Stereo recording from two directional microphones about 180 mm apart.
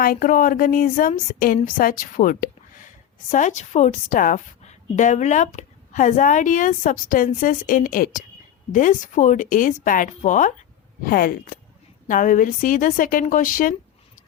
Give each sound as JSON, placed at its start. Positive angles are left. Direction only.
{"t": 0.0, "sound": "a woman's voice", "side_deg": 50}